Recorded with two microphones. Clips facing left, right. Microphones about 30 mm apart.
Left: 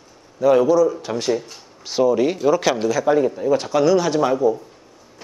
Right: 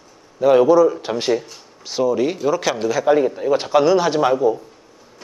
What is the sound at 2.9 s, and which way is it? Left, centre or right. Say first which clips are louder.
A man's voice: right 4 dB; centre.